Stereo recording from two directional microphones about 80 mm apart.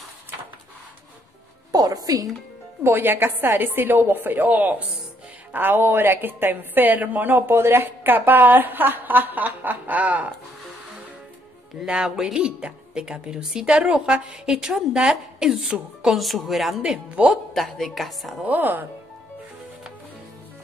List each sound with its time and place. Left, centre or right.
1.7 s music: right
2.8 s a woman's voice: right
11.8 s speech: centre
17.6 s a woman's voice: centre
18.4 s a woman's voice: right